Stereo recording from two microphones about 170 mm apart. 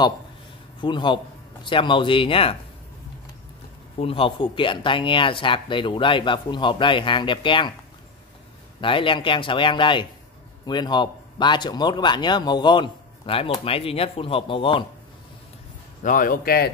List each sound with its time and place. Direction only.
0.7 s a man's voice: 30° left (ahead or behind)
4.0 s speech: 30° left (ahead or behind)
8.8 s speech: 30° left (ahead or behind)
16.0 s a man's voice: 50° left (ahead or behind)